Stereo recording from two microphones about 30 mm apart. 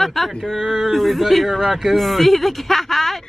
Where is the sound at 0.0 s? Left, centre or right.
Centre.